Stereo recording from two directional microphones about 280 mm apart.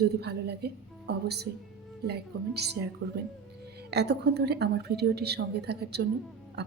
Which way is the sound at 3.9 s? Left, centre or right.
Right.